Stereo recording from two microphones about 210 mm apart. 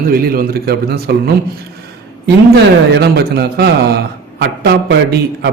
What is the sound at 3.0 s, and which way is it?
A man's voice, 50° right (ahead or behind).